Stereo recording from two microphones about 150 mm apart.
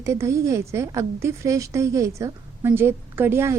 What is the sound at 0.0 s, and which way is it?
A woman's voice, 20° right (ahead or behind).